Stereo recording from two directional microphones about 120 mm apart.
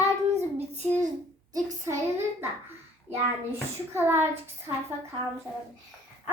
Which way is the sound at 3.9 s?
20° right (ahead or behind).